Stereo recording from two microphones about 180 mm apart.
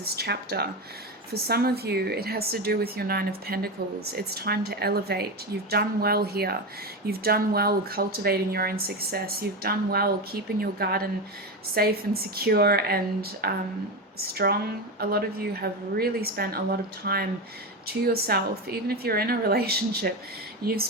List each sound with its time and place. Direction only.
0.0 s speech: 60° right (ahead or behind)